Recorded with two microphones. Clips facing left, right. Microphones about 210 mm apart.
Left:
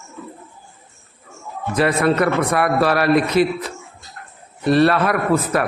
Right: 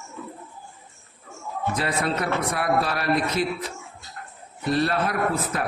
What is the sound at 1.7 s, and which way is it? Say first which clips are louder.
A man's voice: left 11 dB; 65° left (ahead or behind).